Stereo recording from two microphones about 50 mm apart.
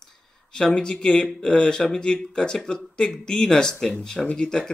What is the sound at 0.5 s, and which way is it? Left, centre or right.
Speech, centre.